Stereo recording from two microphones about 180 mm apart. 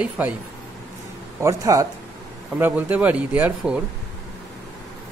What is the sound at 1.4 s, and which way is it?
Speech, 20° right (ahead or behind).